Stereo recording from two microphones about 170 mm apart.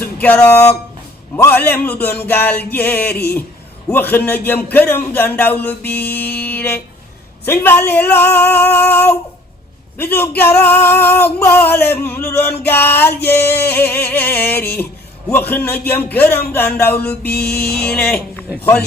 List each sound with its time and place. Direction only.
0.2 s a man's voice: 10° left (ahead or behind)
17.2 s music: 65° left (ahead or behind)
17.7 s a man's voice: 5° left (ahead or behind)